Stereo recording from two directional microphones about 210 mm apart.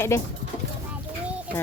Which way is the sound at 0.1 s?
15° left (ahead or behind).